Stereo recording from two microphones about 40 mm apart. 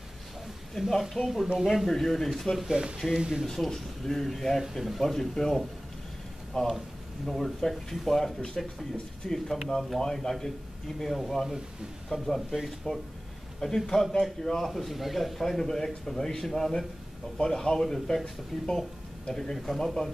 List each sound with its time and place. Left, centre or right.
0.7 s speech: centre
2.6 s speech: centre
3.4 s speech: centre
5.3 s speech: centre
7.2 s speech: centre
9.9 s speech: centre
12.9 s speech: left
13.6 s speech: centre
15.4 s speech: centre